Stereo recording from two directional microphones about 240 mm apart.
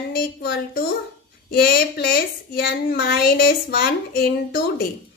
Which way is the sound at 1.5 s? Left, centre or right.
Left.